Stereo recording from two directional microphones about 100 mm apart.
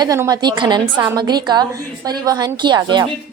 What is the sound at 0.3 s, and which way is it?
A woman's voice, 45° right (ahead or behind).